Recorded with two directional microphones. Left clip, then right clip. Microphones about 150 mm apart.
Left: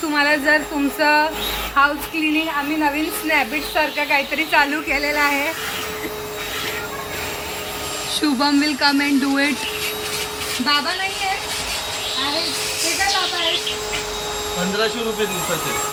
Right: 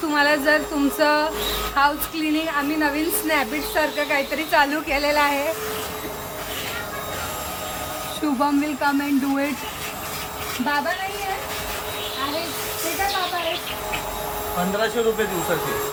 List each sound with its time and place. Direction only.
0.1 s a woman's voice: 20° right (ahead or behind)
8.2 s speech: 5° right (ahead or behind)